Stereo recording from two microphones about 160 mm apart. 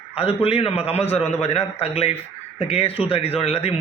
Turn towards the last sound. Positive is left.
turn(degrees=40)  # may be behind; listen again after turning